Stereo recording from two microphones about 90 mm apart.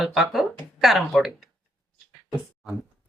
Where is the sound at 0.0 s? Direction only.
Centre (ahead or behind).